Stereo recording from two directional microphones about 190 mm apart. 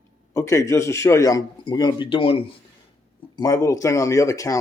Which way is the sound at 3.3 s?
20° left (ahead or behind).